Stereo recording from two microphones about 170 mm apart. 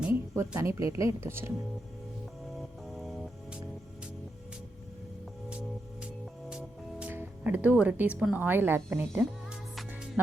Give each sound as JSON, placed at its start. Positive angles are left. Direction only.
{"t": 0.0, "sound": "music", "side_deg": -15}
{"t": 0.8, "sound": "speech", "side_deg": -20}
{"t": 2.9, "sound": "music", "side_deg": 0}
{"t": 5.5, "sound": "music", "side_deg": -5}
{"t": 6.5, "sound": "speech", "side_deg": -5}